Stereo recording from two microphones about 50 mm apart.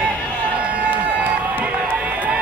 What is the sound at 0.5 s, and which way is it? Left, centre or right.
Run, right.